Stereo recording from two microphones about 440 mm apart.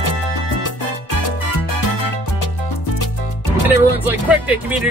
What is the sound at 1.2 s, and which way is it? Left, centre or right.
Music, left.